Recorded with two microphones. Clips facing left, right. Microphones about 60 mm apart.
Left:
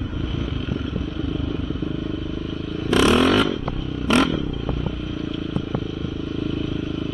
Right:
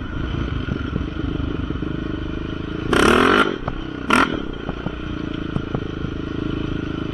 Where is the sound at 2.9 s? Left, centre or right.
Right.